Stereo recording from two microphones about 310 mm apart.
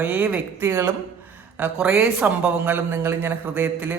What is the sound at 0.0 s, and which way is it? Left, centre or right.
A woman's voice, centre.